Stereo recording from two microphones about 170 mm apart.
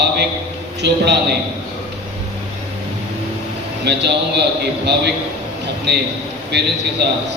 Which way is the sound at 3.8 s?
80° right.